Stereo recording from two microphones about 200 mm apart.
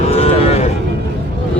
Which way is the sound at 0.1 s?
30° left (ahead or behind).